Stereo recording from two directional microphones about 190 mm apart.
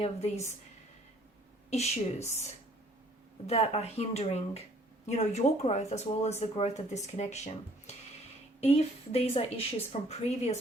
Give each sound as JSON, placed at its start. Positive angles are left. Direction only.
{"t": 0.0, "sound": "speech", "side_deg": 35}
{"t": 1.7, "sound": "speech", "side_deg": 35}
{"t": 3.4, "sound": "speech", "side_deg": 35}